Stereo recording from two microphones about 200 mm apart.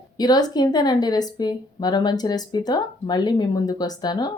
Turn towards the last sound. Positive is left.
turn(degrees=20)  # may be behind; listen again after turning